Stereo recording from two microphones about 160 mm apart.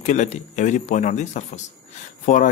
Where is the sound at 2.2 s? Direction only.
55° left (ahead or behind).